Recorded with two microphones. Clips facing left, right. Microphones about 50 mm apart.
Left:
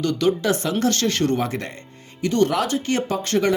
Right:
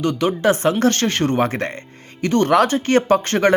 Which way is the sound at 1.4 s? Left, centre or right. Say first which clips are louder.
Right 6 dB; right.